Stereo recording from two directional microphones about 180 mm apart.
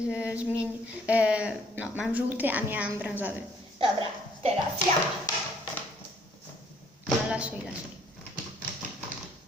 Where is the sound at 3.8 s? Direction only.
30° right (ahead or behind).